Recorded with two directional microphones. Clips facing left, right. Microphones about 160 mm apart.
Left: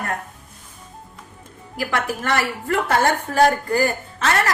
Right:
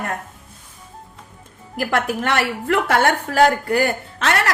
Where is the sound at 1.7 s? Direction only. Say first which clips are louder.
Right 3 dB; 60° right (ahead or behind).